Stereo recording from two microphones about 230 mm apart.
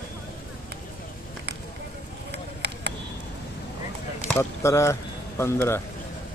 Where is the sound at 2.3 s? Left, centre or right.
Right.